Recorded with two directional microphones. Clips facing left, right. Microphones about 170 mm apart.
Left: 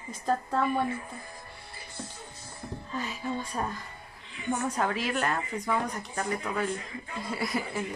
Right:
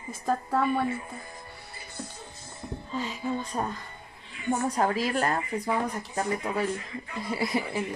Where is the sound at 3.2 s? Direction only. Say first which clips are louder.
Right 3 dB; 10° right (ahead or behind).